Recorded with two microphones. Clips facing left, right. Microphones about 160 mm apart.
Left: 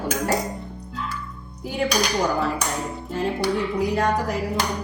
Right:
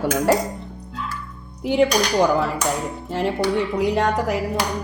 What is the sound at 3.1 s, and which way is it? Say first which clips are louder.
Music: right 3 dB; 75° right (ahead or behind).